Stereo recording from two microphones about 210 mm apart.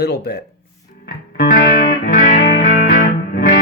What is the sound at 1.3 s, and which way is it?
Music, 50° left (ahead or behind).